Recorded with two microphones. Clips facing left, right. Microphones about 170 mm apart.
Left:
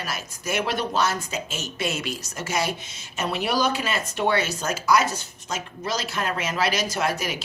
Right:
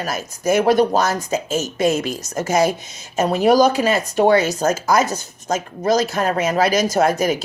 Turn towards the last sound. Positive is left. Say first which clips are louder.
# right 9 dB
turn(degrees=-45)  # may be behind; listen again after turning